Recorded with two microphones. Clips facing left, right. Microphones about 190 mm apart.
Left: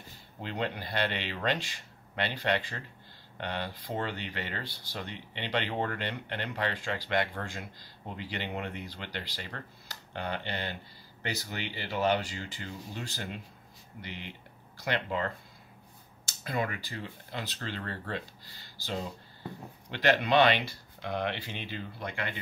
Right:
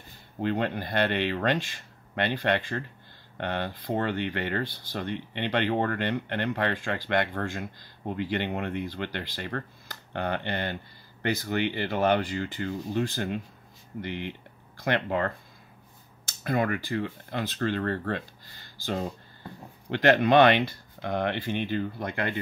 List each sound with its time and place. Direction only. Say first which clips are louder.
0.4 s speech: right 7 dB; 55° right (ahead or behind)